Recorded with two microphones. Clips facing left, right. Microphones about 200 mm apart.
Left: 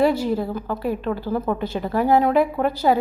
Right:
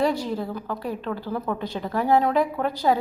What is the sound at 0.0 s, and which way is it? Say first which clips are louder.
A woman's voice: left 5 dB; 5° left (ahead or behind).